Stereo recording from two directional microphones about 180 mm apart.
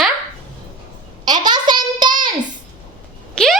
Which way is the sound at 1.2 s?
25° right (ahead or behind).